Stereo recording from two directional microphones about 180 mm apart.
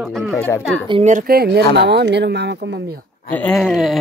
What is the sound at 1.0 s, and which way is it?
Speech, 50° right (ahead or behind).